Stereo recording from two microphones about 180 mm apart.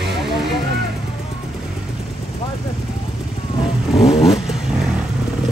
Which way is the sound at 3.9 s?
35° left (ahead or behind).